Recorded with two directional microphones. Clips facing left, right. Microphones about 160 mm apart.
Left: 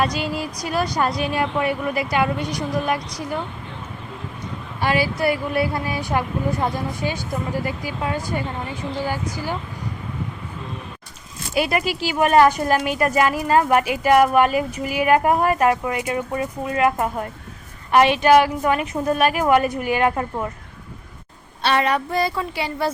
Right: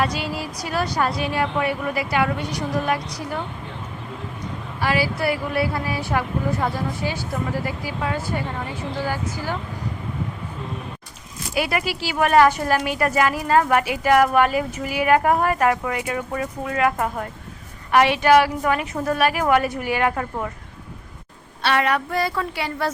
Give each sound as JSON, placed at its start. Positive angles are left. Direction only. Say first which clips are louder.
{"t": 0.0, "sound": "a woman's voice", "louder": "left 2 dB", "side_deg": 15}
{"t": 4.8, "sound": "a woman's voice", "louder": "left 2 dB", "side_deg": 20}
{"t": 11.5, "sound": "speech", "louder": "left 2 dB", "side_deg": 25}
{"t": 21.6, "sound": "speech", "louder": "left 1 dB", "side_deg": 25}